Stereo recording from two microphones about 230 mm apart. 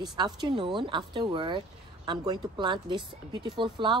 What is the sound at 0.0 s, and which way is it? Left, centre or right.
Speech, centre.